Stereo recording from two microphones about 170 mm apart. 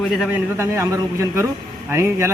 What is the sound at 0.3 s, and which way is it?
A man's voice, 15° right (ahead or behind).